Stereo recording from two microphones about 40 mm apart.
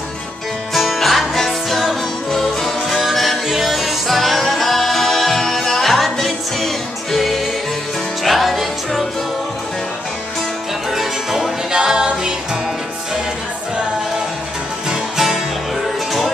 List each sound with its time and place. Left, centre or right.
0.7 s music: centre
10.9 s music: centre
11.7 s music: centre